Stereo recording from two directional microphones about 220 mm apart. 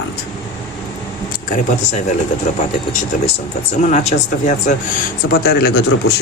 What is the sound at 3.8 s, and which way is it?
Speech, 30° left (ahead or behind).